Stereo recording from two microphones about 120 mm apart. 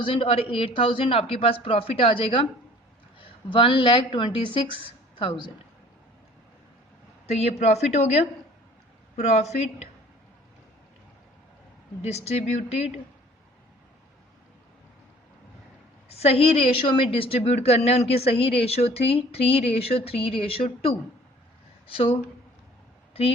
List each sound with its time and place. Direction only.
0.0 s a woman's voice: 50° left (ahead or behind)
3.5 s a woman's voice: 45° left (ahead or behind)
7.3 s a woman's voice: 65° left (ahead or behind)
12.0 s a woman's voice: 60° left (ahead or behind)
16.0 s a woman's voice: 60° left (ahead or behind)
21.8 s a woman's voice: 50° left (ahead or behind)